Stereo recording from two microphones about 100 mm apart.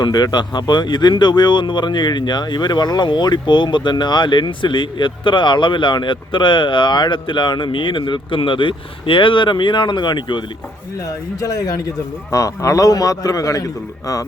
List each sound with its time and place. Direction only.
0.0 s speech: 45° left (ahead or behind)
11.3 s a man's voice: 35° left (ahead or behind)